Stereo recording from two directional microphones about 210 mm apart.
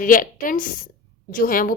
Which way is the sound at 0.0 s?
40° left (ahead or behind).